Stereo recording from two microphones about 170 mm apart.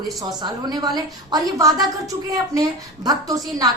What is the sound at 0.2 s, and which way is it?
A woman's voice, 25° right (ahead or behind).